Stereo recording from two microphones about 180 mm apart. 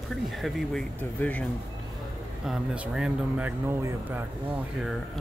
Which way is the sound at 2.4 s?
5° right (ahead or behind).